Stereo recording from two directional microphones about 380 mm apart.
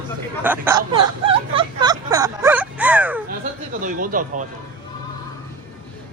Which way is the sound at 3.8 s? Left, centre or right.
Right.